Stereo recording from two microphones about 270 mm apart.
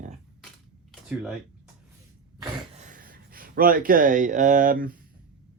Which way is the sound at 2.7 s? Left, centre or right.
Right.